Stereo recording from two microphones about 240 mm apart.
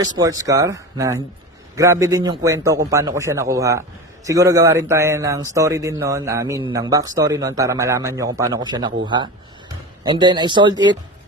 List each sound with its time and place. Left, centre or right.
0.0 s speech: centre